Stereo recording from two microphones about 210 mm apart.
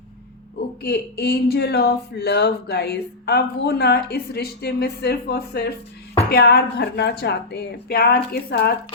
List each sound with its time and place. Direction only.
0.9 s speech: 50° left (ahead or behind)